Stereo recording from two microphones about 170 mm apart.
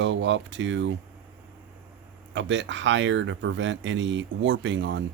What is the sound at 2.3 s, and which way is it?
Speech, 90° right.